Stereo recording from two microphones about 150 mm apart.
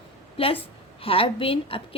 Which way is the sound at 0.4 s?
40° left (ahead or behind).